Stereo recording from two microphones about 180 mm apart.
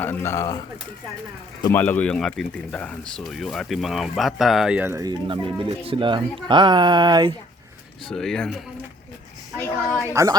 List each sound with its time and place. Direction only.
0.0 s speech: 10° left (ahead or behind)
1.7 s speech: 10° left (ahead or behind); by 5.1 s 15° right (ahead or behind)
5.3 s speech: 30° right (ahead or behind)
8.0 s speech: centre (ahead or behind)
9.6 s speech: 15° left (ahead or behind)
10.1 s a man's voice: 15° right (ahead or behind)